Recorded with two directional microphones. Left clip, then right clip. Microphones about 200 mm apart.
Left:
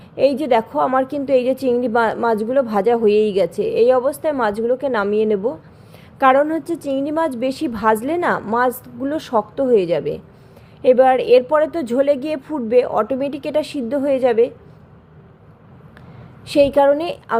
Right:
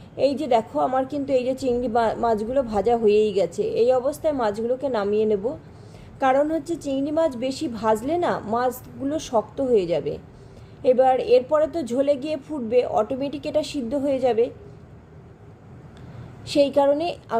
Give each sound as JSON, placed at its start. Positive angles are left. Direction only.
{"t": 0.2, "sound": "a woman's voice", "side_deg": 25}
{"t": 16.5, "sound": "a woman's voice", "side_deg": 25}